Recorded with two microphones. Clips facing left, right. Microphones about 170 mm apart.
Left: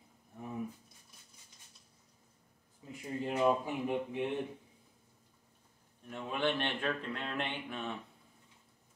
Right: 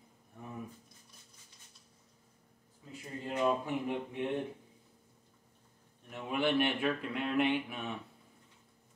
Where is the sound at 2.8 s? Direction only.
25° left (ahead or behind).